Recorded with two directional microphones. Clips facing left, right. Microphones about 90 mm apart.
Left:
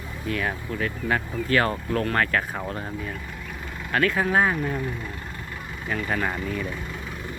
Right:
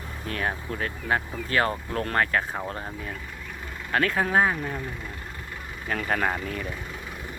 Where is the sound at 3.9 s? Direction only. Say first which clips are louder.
Left 1 dB; 35° right (ahead or behind).